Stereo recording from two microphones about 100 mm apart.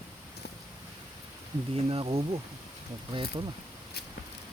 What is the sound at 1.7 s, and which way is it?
Speech, 70° right (ahead or behind).